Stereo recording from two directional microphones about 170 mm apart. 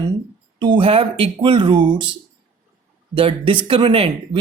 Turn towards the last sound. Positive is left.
turn(degrees=-35)  # may be behind; listen again after turning